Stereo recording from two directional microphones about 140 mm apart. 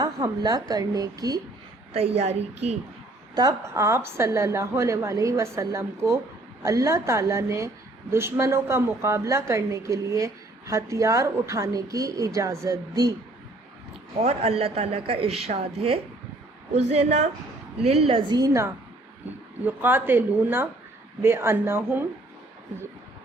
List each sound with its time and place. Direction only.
0.0 s a sound: 25° right (ahead or behind)
0.7 s a woman's voice: 25° right (ahead or behind)
1.9 s a woman's voice: 50° right (ahead or behind)
3.3 s a woman's voice: 25° right (ahead or behind)
14.2 s a woman's voice: 45° right (ahead or behind)
18.0 s a woman's voice: 40° right (ahead or behind); by 22.0 s 15° right (ahead or behind)